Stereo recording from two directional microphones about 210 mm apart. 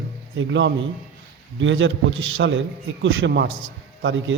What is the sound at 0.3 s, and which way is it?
A man's voice, 60° right (ahead or behind).